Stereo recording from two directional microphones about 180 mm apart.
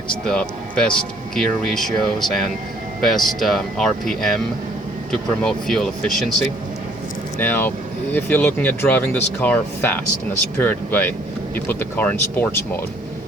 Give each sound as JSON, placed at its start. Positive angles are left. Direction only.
{"t": 0.1, "sound": "speech", "side_deg": 5}
{"t": 5.4, "sound": "speech", "side_deg": 5}
{"t": 7.3, "sound": "speech", "side_deg": 10}